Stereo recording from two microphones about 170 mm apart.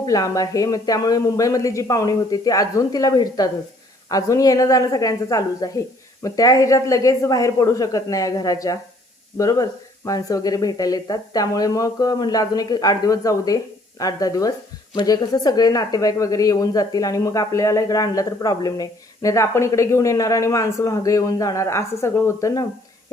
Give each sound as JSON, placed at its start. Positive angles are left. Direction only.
{"t": 0.0, "sound": "speech", "side_deg": 20}